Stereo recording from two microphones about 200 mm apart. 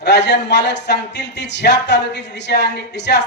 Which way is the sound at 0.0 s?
55° left (ahead or behind).